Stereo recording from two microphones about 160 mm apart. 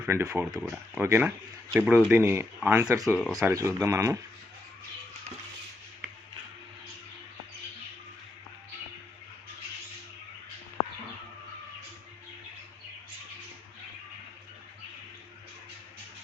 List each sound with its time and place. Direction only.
0.0 s speech: 15° right (ahead or behind)